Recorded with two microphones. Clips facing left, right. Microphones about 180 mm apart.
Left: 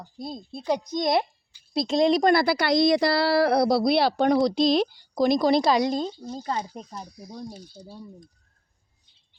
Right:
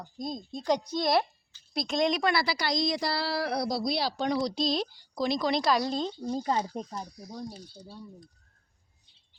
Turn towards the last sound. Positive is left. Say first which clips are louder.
# left 3 dB
turn(degrees=15)  # may be behind; listen again after turning